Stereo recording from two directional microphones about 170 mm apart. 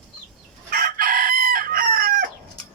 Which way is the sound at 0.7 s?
60° right (ahead or behind).